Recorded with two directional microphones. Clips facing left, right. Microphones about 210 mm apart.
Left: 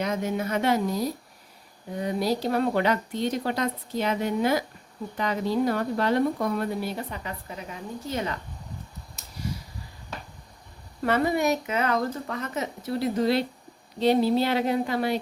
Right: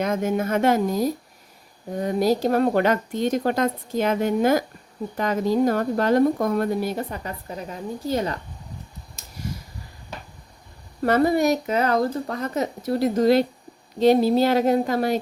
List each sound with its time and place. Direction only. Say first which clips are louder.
0.0 s speech: right 4 dB; 50° right (ahead or behind)
11.0 s speech: right 5 dB; 40° right (ahead or behind)